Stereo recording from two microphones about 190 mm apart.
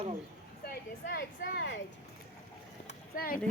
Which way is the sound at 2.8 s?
50° left (ahead or behind).